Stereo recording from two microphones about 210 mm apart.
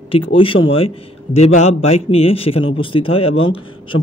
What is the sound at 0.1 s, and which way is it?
A man's voice, 25° left (ahead or behind).